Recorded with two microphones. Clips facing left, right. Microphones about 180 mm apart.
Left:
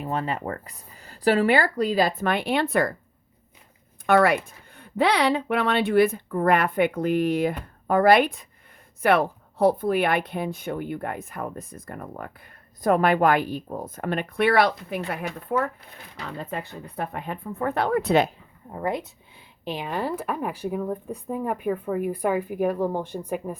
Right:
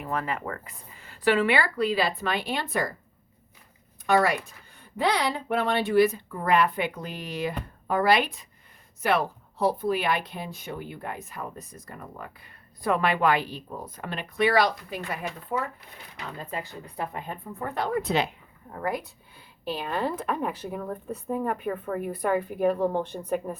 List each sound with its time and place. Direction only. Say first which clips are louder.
0.0 s speech: left 3 dB; 30° left (ahead or behind); by 2.9 s 60° left (ahead or behind)
4.0 s a woman's voice: left 4 dB; 60° left (ahead or behind)
18.7 s speech: left 3 dB; 20° left (ahead or behind)